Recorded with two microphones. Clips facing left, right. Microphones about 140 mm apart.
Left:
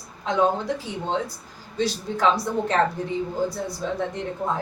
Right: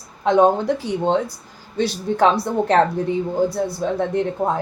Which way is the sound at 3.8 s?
60° right (ahead or behind).